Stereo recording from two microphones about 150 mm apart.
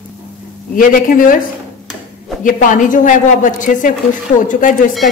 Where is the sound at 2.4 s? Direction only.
60° left (ahead or behind).